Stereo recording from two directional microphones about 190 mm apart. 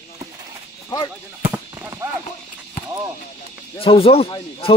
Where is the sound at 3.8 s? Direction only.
30° left (ahead or behind).